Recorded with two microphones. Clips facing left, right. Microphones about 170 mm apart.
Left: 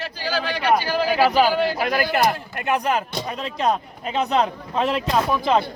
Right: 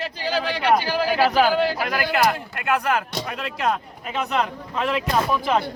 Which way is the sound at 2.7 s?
20° left (ahead or behind).